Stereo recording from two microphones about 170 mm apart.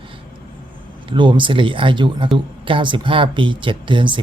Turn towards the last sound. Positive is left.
turn(degrees=-30)  # may be behind; listen again after turning